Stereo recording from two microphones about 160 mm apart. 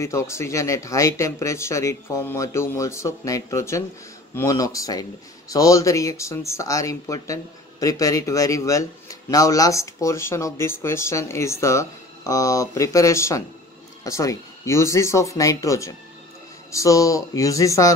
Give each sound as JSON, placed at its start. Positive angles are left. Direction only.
{"t": 0.0, "sound": "speech", "side_deg": 20}